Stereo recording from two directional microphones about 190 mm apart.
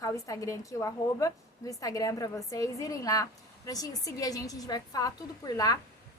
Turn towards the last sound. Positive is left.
turn(degrees=20)  # may be behind; listen again after turning